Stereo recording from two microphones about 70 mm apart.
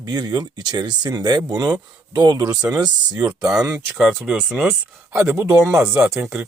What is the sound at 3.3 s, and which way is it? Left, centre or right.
Speech, right.